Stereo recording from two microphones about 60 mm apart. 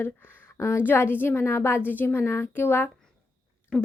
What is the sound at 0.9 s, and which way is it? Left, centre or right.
A woman's voice, left.